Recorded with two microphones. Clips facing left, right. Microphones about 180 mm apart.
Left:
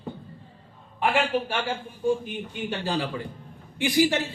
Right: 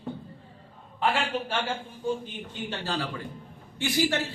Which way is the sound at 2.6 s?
15° left (ahead or behind).